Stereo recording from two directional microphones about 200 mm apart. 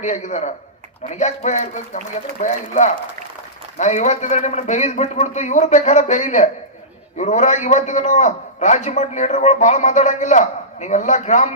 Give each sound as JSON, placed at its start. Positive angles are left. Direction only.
{"t": 0.0, "sound": "a man's voice", "side_deg": 35}